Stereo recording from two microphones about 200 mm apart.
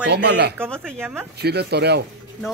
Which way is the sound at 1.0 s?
10° right (ahead or behind).